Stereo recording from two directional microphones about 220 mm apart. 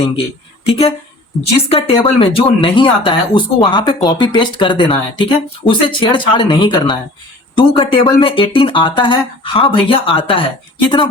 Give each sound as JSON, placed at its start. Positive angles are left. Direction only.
{"t": 0.6, "sound": "a woman's voice", "side_deg": 25}